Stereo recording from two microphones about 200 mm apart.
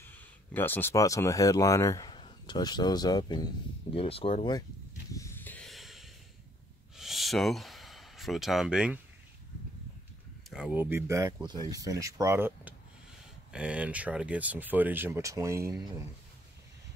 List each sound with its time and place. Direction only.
0.0 s speech: 10° left (ahead or behind)
5.1 s a sound: 15° left (ahead or behind); by 9.0 s 5° right (ahead or behind)
10.5 s speech: 5° right (ahead or behind)